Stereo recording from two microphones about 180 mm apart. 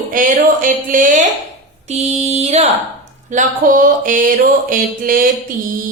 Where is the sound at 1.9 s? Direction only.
35° right (ahead or behind).